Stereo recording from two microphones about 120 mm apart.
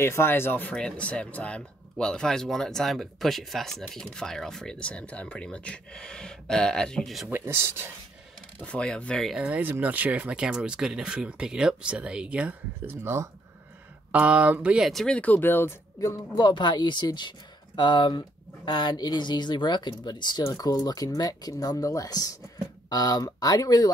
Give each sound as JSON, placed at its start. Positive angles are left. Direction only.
{"t": 0.0, "sound": "speech", "side_deg": 20}
{"t": 7.2, "sound": "speech", "side_deg": -20}
{"t": 8.5, "sound": "speech", "side_deg": 10}
{"t": 9.3, "sound": "speech", "side_deg": -10}
{"t": 14.1, "sound": "speech", "side_deg": -10}
{"t": 14.9, "sound": "speech", "side_deg": 5}
{"t": 16.3, "sound": "speech", "side_deg": 35}